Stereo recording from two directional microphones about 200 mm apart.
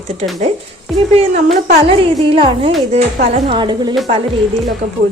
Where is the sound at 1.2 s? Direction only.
35° right (ahead or behind).